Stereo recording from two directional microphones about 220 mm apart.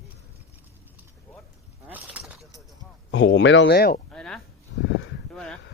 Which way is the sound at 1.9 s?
5° right (ahead or behind).